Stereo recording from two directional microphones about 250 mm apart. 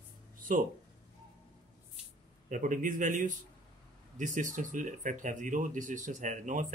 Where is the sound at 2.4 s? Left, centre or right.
Right.